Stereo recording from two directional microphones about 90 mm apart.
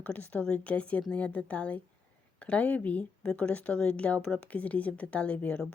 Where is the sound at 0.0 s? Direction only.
20° left (ahead or behind).